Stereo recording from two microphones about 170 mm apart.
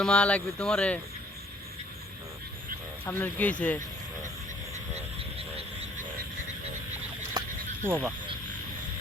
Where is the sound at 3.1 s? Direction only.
10° left (ahead or behind).